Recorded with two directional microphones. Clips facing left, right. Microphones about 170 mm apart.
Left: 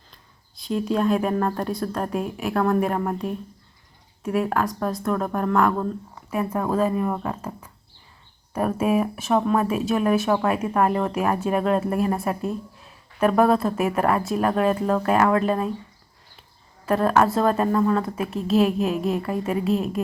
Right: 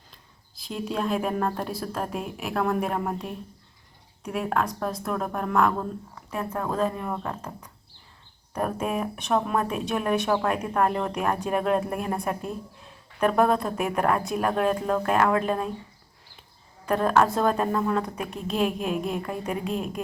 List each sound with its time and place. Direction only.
0.5 s speech: centre (ahead or behind)
16.8 s speech: centre (ahead or behind)